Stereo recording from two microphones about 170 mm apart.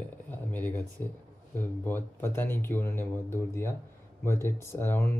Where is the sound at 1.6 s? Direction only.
10° left (ahead or behind).